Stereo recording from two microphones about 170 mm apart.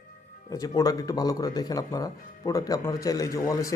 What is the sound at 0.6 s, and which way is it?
Speech, 20° left (ahead or behind).